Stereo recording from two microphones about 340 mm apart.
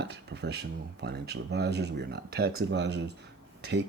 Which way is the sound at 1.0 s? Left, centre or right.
Right.